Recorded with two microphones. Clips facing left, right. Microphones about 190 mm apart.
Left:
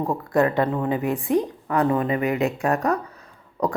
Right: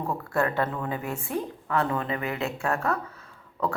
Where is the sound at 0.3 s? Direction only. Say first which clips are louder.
Left 6 dB; 15° left (ahead or behind).